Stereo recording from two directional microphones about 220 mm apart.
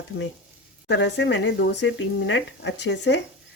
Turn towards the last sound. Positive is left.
turn(degrees=50)  # may be behind; listen again after turning